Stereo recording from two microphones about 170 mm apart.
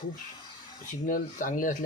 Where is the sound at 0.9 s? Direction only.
50° left (ahead or behind).